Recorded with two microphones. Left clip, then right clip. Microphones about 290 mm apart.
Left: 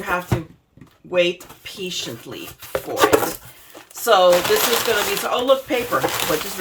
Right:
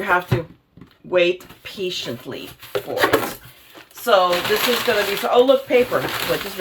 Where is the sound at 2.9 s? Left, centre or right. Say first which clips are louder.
Left 2 dB; left.